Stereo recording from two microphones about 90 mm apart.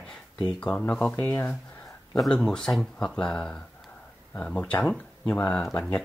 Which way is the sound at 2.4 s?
5° left (ahead or behind).